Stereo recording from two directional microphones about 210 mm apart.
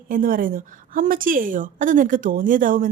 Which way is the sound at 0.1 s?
40° right (ahead or behind).